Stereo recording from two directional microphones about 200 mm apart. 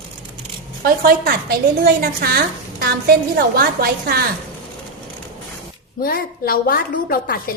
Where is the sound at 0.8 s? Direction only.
50° right (ahead or behind).